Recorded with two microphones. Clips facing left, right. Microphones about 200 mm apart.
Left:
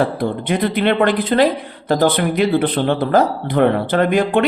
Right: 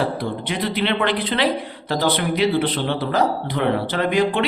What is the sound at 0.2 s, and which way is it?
Speech, 50° left (ahead or behind).